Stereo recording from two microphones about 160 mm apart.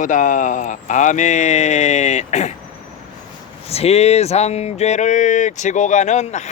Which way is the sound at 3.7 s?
40° left (ahead or behind).